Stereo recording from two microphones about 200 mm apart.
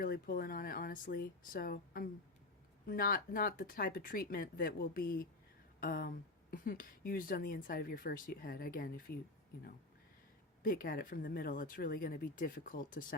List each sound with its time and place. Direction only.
0.0 s speech: 45° left (ahead or behind)
10.6 s speech: 45° left (ahead or behind)